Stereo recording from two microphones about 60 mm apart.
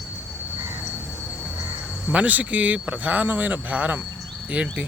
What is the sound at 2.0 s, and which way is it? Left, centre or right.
A man's voice, right.